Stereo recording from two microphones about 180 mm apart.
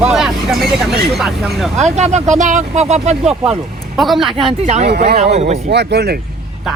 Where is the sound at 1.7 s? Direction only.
40° right (ahead or behind).